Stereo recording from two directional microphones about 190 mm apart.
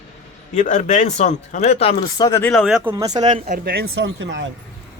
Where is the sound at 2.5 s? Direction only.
Centre (ahead or behind).